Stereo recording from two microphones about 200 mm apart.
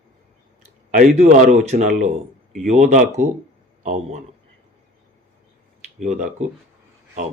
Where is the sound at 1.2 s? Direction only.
35° right (ahead or behind).